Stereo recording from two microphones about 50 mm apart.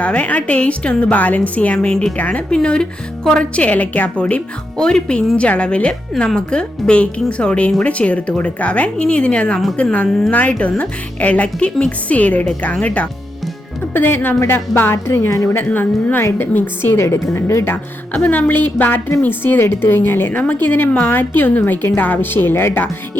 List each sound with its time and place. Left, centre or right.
0.0 s a woman's voice: left
1.1 s a woman's voice: left
2.5 s a woman's voice: centre
10.1 s speech: centre
10.6 s a woman's voice: left
13.9 s a woman's voice: left
14.3 s speech: left
14.9 s a woman's voice: left
15.5 s a woman's voice: left
17.0 s a woman's voice: left
18.2 s a woman's voice: left